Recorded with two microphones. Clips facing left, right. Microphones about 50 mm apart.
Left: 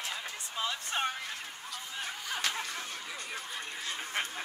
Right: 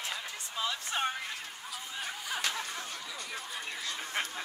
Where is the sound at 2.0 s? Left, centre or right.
Centre.